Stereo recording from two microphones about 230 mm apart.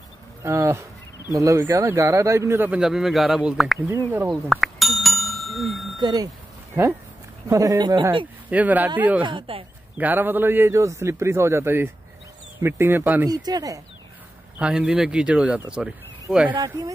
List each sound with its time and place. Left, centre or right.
0.4 s speech: centre
3.9 s bicycle bell: centre
5.9 s speech: centre
8.5 s speech: centre
9.2 s speech: right
9.9 s speech: centre
14.6 s speech: centre
16.5 s speech: centre